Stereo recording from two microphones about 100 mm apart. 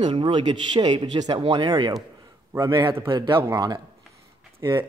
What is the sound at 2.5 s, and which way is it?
Speech, 35° right (ahead or behind).